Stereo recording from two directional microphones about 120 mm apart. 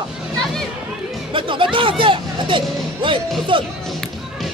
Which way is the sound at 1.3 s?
45° right (ahead or behind).